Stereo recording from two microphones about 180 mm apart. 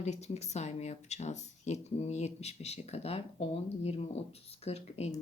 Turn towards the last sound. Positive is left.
turn(degrees=35)  # may be behind; listen again after turning